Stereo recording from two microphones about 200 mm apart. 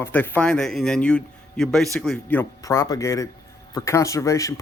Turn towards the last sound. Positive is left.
turn(degrees=15)  # may be behind; listen again after turning